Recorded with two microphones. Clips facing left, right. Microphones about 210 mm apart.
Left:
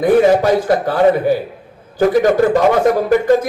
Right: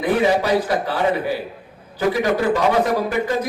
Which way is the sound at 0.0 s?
45° left (ahead or behind).